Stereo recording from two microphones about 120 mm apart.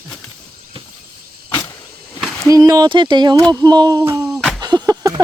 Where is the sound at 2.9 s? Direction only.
40° right (ahead or behind).